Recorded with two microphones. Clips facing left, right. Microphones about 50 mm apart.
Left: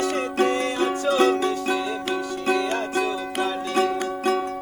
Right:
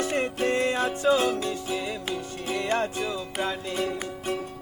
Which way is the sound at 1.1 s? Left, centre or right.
Left.